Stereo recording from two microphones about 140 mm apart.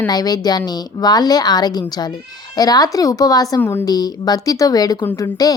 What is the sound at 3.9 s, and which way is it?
A woman's voice, 30° left (ahead or behind).